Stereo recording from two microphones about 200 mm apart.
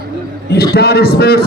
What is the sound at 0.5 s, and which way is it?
Speech, 50° left (ahead or behind).